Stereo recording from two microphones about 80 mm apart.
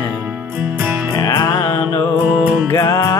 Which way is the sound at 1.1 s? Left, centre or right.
Left.